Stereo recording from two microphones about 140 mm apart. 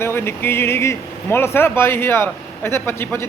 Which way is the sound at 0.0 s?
15° left (ahead or behind).